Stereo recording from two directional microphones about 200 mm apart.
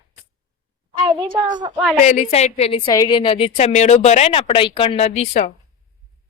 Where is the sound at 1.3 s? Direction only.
20° right (ahead or behind).